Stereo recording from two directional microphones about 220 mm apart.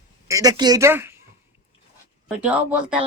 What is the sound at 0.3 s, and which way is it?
Speech, 15° right (ahead or behind).